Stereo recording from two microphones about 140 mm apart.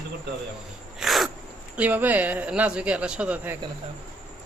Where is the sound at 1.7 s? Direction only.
10° right (ahead or behind).